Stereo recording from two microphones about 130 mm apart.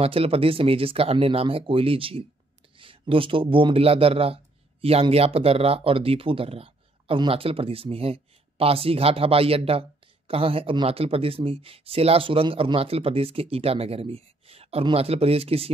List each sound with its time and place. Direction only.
0.0 s speech: 50° right (ahead or behind)